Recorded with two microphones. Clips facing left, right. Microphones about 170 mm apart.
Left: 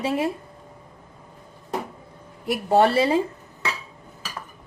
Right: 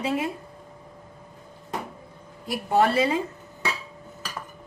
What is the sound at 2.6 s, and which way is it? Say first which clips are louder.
Speech: left 3 dB; 30° left (ahead or behind).